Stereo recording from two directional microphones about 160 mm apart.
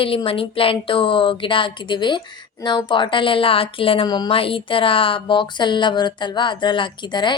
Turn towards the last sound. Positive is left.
turn(degrees=30)  # may be behind; listen again after turning